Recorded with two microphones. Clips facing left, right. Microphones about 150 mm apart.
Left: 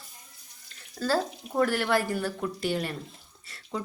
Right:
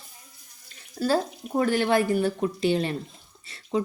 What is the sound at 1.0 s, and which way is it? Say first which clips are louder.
A woman's voice: right 3 dB; 20° right (ahead or behind).